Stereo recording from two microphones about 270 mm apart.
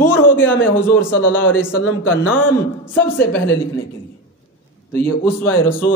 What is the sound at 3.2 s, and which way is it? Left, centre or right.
Speech, left.